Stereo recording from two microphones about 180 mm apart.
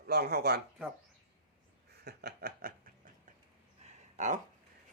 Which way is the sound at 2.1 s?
60° right (ahead or behind).